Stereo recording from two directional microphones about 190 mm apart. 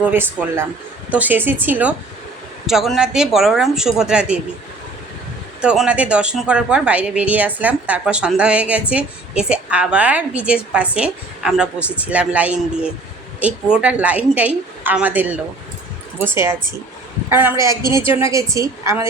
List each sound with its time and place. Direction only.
0.0 s a woman's voice: 10° right (ahead or behind)
5.6 s a woman's voice: 5° right (ahead or behind)